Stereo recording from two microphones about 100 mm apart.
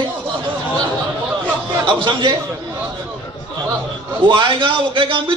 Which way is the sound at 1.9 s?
55° right (ahead or behind).